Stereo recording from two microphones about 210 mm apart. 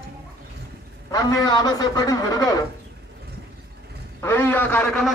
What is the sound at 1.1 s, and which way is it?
A man's voice, 20° left (ahead or behind).